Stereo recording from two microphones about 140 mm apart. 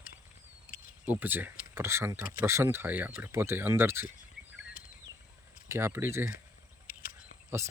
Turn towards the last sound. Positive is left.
turn(degrees=-20)  # may be behind; listen again after turning